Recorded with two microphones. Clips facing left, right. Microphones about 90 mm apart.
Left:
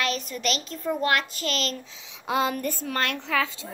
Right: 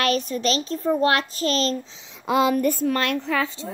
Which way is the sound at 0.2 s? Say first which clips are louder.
Right 5 dB; 35° right (ahead or behind).